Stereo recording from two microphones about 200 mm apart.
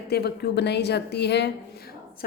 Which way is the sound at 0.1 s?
55° left (ahead or behind).